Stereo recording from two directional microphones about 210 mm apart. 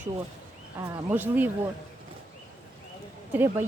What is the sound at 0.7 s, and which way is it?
Speech, 10° right (ahead or behind).